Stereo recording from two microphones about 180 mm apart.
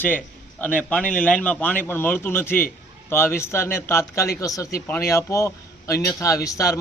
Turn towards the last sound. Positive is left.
turn(degrees=20)  # may be behind; listen again after turning